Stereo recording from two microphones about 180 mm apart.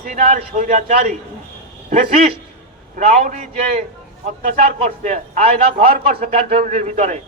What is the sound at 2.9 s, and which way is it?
A man's voice, 40° right (ahead or behind).